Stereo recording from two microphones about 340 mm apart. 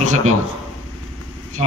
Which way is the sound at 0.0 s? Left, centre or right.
Right.